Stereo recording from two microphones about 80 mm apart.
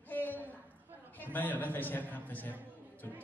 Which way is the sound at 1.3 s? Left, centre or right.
Left.